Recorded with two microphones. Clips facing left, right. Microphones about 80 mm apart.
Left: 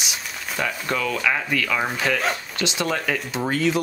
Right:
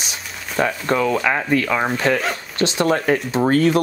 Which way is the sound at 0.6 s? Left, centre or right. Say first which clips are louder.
Right 7 dB; right.